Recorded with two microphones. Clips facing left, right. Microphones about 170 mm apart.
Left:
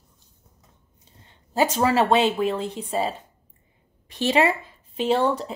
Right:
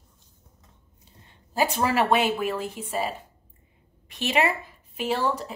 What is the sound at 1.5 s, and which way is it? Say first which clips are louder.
Speech: left 3 dB; 20° left (ahead or behind).